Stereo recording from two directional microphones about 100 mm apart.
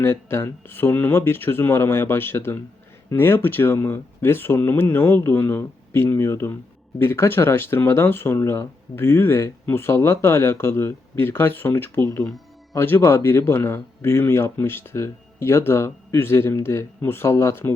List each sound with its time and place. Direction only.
0.0 s speech: 25° left (ahead or behind)